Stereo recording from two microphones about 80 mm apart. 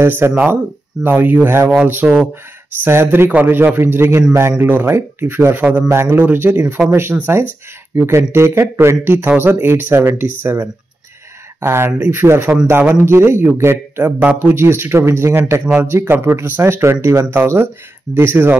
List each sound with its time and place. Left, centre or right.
0.0 s speech: right
6.8 s speech: right
15.6 s speech: right